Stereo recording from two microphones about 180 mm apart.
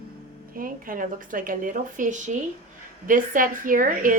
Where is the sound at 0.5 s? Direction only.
50° right (ahead or behind).